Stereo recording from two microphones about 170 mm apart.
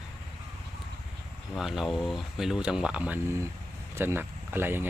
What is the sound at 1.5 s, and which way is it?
Speech, centre (ahead or behind).